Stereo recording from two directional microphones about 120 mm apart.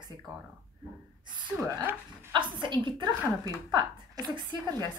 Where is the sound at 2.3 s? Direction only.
40° right (ahead or behind).